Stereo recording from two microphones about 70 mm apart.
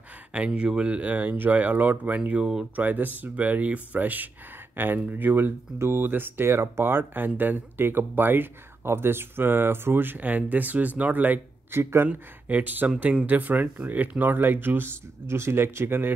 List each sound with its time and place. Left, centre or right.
0.5 s speech: centre
11.8 s speech: right
12.1 s speech: right